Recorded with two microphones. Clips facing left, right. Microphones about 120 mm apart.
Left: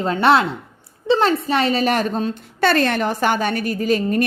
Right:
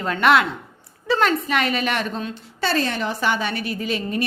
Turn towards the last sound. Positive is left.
turn(degrees=45)  # may be behind; listen again after turning